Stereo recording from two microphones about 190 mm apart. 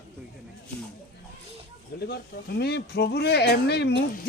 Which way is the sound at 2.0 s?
55° left (ahead or behind).